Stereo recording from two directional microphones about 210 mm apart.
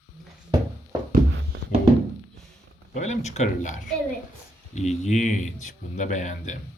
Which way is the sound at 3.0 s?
35° left (ahead or behind).